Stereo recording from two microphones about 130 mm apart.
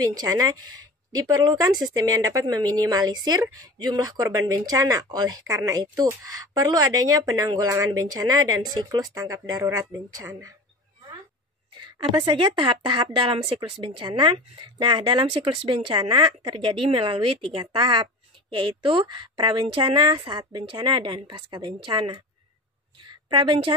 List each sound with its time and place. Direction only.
0.0 s a woman's voice: 30° right (ahead or behind)
12.2 s speech: 35° right (ahead or behind)
23.0 s a sound: 35° right (ahead or behind)